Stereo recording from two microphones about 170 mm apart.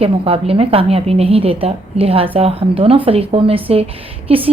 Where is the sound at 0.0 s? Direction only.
35° right (ahead or behind).